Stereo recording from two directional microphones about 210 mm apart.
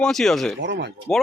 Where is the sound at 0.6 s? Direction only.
60° right (ahead or behind).